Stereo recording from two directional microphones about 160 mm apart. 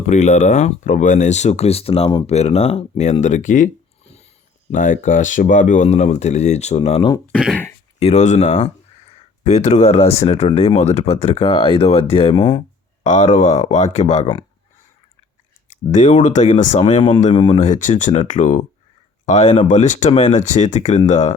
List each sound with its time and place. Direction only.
0.1 s speech: 45° left (ahead or behind)
4.7 s speech: 55° left (ahead or behind)
7.3 s speech: centre (ahead or behind)
7.9 s speech: 45° left (ahead or behind)
13.0 s speech: 50° left (ahead or behind)
15.9 s speech: 50° left (ahead or behind)
17.5 s speech: 50° left (ahead or behind)